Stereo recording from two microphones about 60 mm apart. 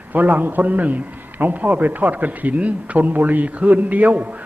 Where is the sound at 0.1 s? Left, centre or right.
Right.